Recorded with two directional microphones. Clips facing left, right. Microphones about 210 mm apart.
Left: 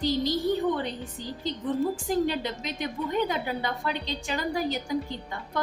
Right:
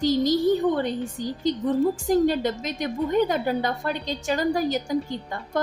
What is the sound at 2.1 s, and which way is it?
A woman's voice, 45° right (ahead or behind).